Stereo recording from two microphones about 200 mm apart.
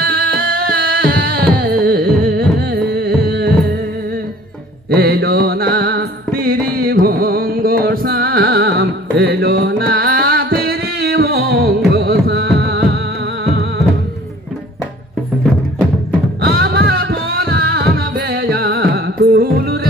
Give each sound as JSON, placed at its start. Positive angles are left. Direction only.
{"t": 0.0, "sound": "music", "side_deg": -50}
{"t": 4.9, "sound": "music", "side_deg": -50}
{"t": 15.4, "sound": "music", "side_deg": 5}
{"t": 16.4, "sound": "music", "side_deg": -50}